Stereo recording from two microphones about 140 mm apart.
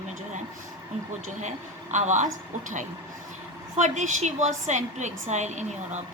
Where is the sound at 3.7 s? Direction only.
55° right (ahead or behind).